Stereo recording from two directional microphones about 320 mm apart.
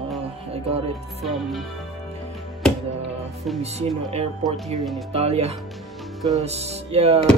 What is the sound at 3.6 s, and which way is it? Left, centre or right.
Speech, centre.